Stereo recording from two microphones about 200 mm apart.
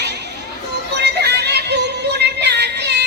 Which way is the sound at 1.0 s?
55° right (ahead or behind).